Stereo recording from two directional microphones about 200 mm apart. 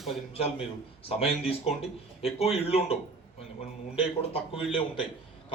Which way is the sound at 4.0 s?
30° left (ahead or behind).